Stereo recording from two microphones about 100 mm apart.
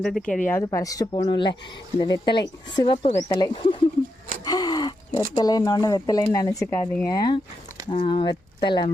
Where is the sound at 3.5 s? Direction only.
60° left (ahead or behind).